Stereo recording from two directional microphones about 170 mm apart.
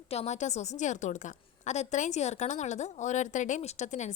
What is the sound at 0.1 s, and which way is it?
A woman's voice, 40° left (ahead or behind).